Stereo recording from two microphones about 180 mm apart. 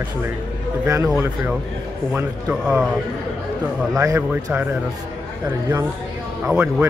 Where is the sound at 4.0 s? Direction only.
15° right (ahead or behind).